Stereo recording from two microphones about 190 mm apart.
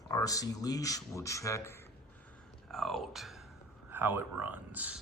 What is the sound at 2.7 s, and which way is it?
Speech, centre (ahead or behind).